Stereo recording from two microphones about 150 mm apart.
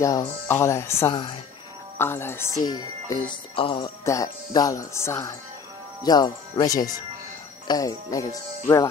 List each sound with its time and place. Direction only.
0.0 s speech: 25° left (ahead or behind)
1.1 s speech: 30° left (ahead or behind)
2.0 s speech: 15° left (ahead or behind); by 3.9 s 35° left (ahead or behind)
4.0 s speech: 20° left (ahead or behind)